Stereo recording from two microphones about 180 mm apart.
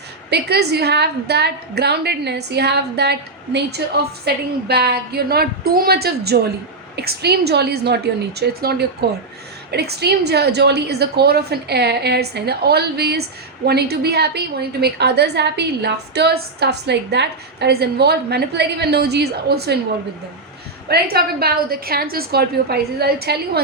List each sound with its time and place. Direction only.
0.3 s a woman's voice: 65° right (ahead or behind)
20.8 s a woman's voice: 60° right (ahead or behind)